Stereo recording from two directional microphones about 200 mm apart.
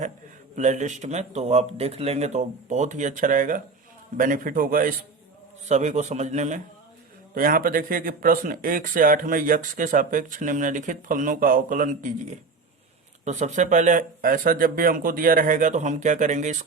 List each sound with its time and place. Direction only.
0.5 s speech: 35° right (ahead or behind)